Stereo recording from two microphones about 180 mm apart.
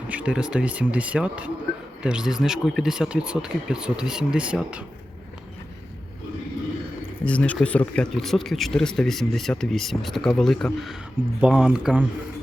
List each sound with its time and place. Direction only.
0.1 s speech: 5° right (ahead or behind)
7.3 s speech: 10° left (ahead or behind)